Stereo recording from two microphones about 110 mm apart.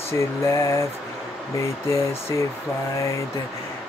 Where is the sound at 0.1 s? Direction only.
25° left (ahead or behind).